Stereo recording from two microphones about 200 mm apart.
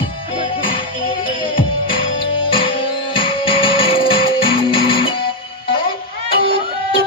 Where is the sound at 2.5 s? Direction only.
25° left (ahead or behind).